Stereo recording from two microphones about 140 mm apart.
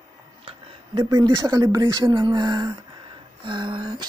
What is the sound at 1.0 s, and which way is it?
Speech, 25° right (ahead or behind).